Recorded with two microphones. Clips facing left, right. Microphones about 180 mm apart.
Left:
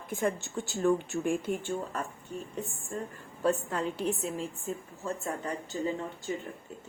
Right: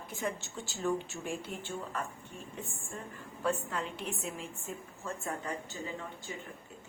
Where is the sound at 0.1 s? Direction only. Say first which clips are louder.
Left 7 dB; 50° left (ahead or behind).